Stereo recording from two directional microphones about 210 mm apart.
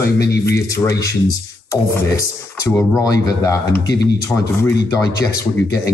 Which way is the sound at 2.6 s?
15° left (ahead or behind).